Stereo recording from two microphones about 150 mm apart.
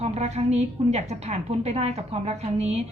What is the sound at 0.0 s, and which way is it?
A woman's voice, 45° right (ahead or behind).